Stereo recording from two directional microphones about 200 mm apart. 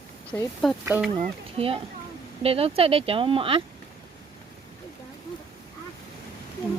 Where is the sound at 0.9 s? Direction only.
Centre (ahead or behind).